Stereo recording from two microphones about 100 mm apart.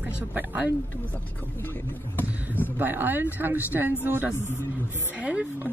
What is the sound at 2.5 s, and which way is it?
A woman's voice, 20° right (ahead or behind).